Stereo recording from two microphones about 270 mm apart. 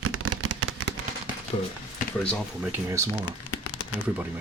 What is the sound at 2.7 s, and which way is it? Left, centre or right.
Speech, centre.